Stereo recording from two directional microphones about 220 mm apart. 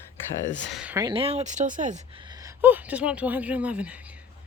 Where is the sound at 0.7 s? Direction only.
5° right (ahead or behind).